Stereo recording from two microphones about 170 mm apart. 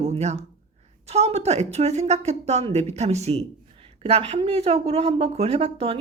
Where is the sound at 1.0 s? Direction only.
40° right (ahead or behind).